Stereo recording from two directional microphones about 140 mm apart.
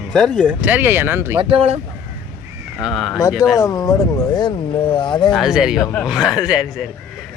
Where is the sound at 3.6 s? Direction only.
25° left (ahead or behind).